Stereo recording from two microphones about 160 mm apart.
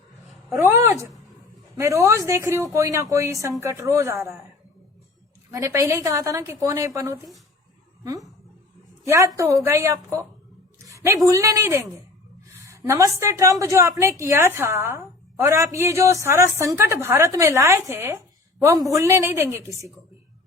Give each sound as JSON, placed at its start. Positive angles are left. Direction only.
{"t": 0.6, "sound": "a woman's voice", "side_deg": -20}
{"t": 5.5, "sound": "a woman's voice", "side_deg": -20}
{"t": 9.0, "sound": "a woman's voice", "side_deg": -20}
{"t": 10.8, "sound": "a sound", "side_deg": -20}
{"t": 11.3, "sound": "a woman's voice", "side_deg": -20}